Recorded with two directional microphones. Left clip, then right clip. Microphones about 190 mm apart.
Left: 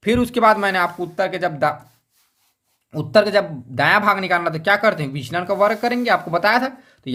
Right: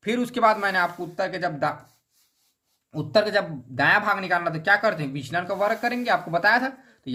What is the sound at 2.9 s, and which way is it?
Speech, 30° left (ahead or behind).